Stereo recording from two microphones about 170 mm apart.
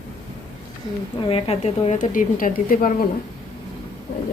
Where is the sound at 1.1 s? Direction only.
30° left (ahead or behind); by 3.0 s 55° left (ahead or behind).